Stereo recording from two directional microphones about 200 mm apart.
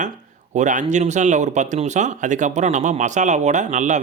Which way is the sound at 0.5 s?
40° right (ahead or behind).